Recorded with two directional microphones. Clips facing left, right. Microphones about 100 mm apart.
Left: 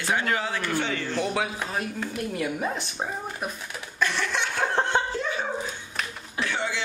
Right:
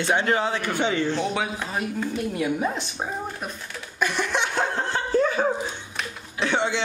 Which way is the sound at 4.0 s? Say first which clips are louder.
Right 2 dB; 15° right (ahead or behind).